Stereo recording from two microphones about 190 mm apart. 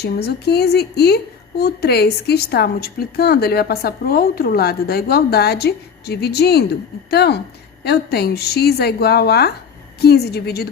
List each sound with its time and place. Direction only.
0.0 s speech: 60° left (ahead or behind)